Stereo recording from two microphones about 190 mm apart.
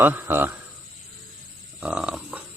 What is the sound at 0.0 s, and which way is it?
Speech, 10° right (ahead or behind).